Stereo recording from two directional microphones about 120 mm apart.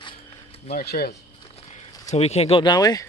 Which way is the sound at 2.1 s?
60° left (ahead or behind).